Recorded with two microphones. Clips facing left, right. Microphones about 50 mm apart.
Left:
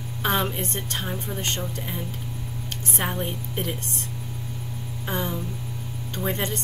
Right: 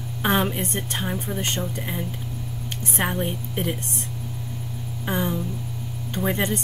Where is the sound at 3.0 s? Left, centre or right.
Centre.